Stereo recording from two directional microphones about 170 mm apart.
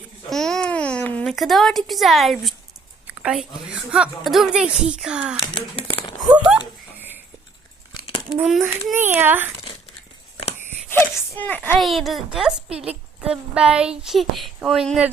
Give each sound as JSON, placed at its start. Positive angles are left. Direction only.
{"t": 0.3, "sound": "a child's voice", "side_deg": 5}
{"t": 5.4, "sound": "speech", "side_deg": 30}
{"t": 6.3, "sound": "speech", "side_deg": -5}
{"t": 7.9, "sound": "a sound", "side_deg": 30}
{"t": 8.4, "sound": "a woman's voice", "side_deg": 0}
{"t": 10.9, "sound": "a woman's voice", "side_deg": 10}